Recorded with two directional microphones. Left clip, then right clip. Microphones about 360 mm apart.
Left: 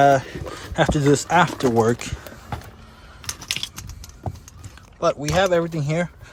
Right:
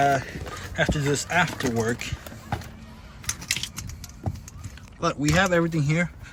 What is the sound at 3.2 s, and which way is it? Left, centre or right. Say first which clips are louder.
Typing: left 1 dB; centre.